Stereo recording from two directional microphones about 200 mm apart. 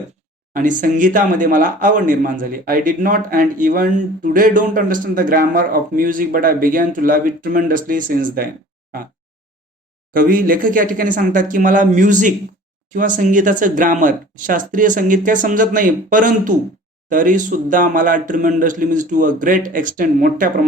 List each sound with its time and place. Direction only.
0.5 s speech: 40° right (ahead or behind)
10.1 s speech: 45° right (ahead or behind)